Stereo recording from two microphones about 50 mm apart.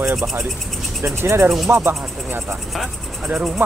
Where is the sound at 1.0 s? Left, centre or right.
Right.